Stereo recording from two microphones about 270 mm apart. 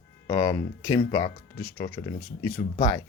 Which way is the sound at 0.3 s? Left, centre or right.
Centre.